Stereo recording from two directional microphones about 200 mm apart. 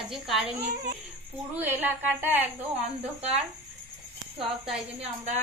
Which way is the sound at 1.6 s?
10° right (ahead or behind).